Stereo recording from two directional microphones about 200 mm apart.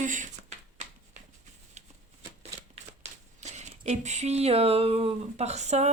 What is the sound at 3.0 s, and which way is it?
Speech, 35° right (ahead or behind).